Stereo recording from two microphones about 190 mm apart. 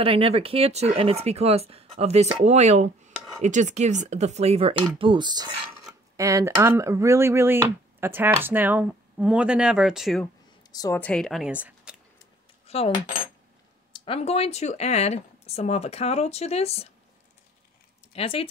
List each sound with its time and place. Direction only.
0.0 s speech: 30° right (ahead or behind); by 10.2 s centre (ahead or behind)
10.7 s a woman's voice: 20° left (ahead or behind)
11.0 s speech: 5° left (ahead or behind)
12.6 s cutlery: 30° left (ahead or behind)
13.9 s speech: 30° left (ahead or behind)
18.1 s speech: 30° left (ahead or behind)